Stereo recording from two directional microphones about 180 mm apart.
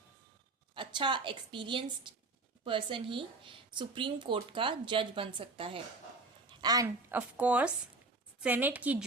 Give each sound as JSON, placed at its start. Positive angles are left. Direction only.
{"t": 0.7, "sound": "a woman's voice", "side_deg": -25}